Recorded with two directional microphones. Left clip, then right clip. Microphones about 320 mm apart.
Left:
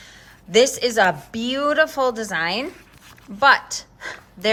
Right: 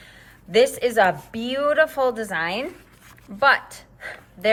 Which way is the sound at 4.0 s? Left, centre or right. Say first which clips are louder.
Right 1 dB; centre.